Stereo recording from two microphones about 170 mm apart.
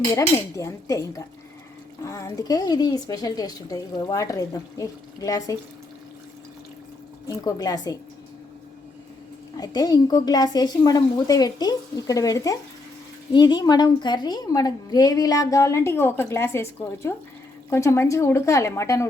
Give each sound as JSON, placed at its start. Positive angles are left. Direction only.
{"t": 0.1, "sound": "a woman's voice", "side_deg": 20}
{"t": 7.3, "sound": "a woman's voice", "side_deg": 20}
{"t": 9.6, "sound": "a woman's voice", "side_deg": 25}